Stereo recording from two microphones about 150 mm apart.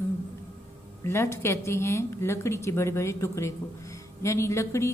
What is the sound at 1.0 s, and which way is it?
Speech, 15° left (ahead or behind).